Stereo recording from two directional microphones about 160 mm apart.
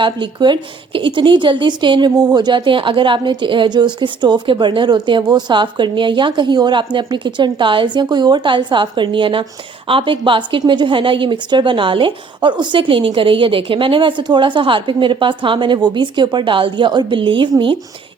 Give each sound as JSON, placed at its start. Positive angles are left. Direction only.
{"t": 0.0, "sound": "a woman's voice", "side_deg": -30}